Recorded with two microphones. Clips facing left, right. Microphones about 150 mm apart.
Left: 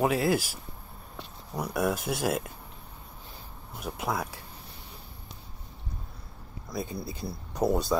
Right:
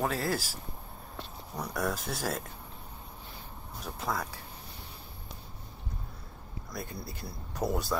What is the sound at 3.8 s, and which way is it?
Speech, 15° left (ahead or behind).